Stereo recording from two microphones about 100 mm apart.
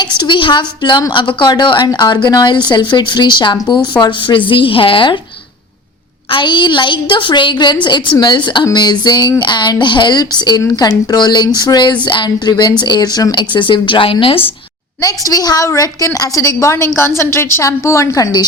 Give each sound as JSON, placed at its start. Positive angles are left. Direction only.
{"t": 0.2, "sound": "a woman's voice", "side_deg": 55}
{"t": 6.3, "sound": "a woman's voice", "side_deg": 50}
{"t": 15.0, "sound": "a woman's voice", "side_deg": 35}